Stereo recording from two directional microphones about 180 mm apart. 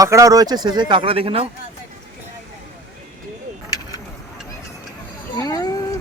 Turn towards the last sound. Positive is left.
turn(degrees=20)  # may be behind; listen again after turning